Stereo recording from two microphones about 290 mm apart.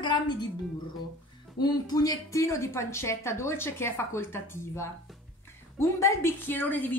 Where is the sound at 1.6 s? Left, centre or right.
Centre.